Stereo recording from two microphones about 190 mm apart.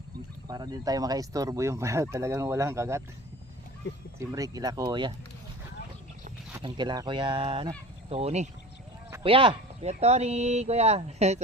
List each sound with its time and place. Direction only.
0.4 s speech: 20° right (ahead or behind)
4.2 s speech: 20° right (ahead or behind)
6.6 s speech: 25° right (ahead or behind)